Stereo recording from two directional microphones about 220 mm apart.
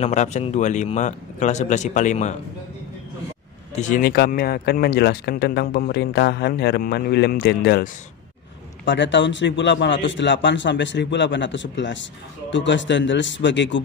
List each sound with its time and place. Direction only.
0.0 s speech: 30° left (ahead or behind)
3.7 s a man's voice: 35° left (ahead or behind); by 13.7 s 55° left (ahead or behind)